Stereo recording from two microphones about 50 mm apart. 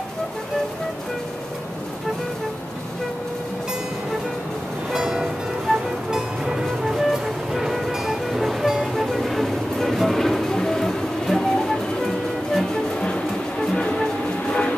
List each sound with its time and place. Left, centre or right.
4.9 s music: centre
14.5 s train: left